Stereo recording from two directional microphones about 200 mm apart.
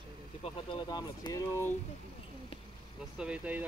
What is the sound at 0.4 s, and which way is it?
Speech, 25° left (ahead or behind).